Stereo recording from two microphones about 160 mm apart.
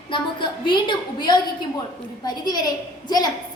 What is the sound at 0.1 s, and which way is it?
A woman's voice, 30° left (ahead or behind).